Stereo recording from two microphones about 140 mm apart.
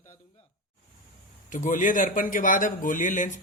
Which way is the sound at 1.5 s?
70° left (ahead or behind).